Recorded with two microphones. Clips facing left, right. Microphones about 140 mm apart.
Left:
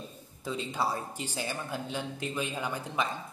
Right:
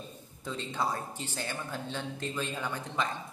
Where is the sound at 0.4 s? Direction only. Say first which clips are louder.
Left 2 dB; 5° left (ahead or behind).